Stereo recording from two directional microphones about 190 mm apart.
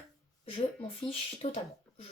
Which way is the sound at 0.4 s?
30° left (ahead or behind).